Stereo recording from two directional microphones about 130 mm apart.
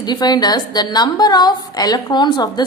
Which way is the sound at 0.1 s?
30° left (ahead or behind).